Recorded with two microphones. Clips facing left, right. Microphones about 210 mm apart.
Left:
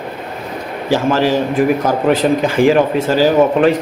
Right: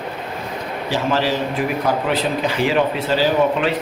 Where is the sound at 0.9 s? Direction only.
50° left (ahead or behind).